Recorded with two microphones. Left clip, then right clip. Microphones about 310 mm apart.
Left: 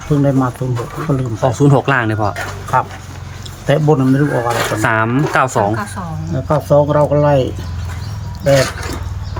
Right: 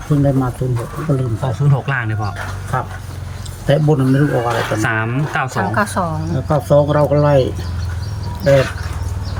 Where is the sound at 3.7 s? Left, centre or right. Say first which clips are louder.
Left 2 dB; centre.